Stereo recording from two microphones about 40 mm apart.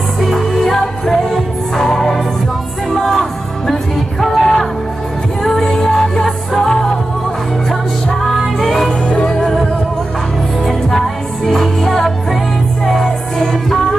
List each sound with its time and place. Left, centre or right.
0.2 s music: centre
8.4 s music: centre
9.0 s music: left
10.6 s music: centre